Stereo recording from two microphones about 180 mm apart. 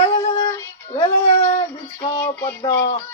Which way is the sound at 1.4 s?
40° left (ahead or behind).